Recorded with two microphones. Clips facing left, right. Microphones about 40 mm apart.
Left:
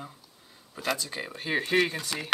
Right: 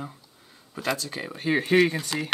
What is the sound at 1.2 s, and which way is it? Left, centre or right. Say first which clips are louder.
Speech: right 7 dB; centre.